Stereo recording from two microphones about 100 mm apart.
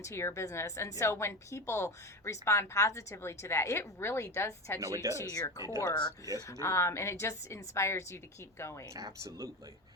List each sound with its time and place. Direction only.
0.0 s a woman's voice: 30° left (ahead or behind)
4.8 s speech: 30° right (ahead or behind)
5.3 s speech: 40° left (ahead or behind)
5.8 s speech: 50° left (ahead or behind)
6.6 s a woman's voice: 30° left (ahead or behind)
8.9 s speech: 35° right (ahead or behind)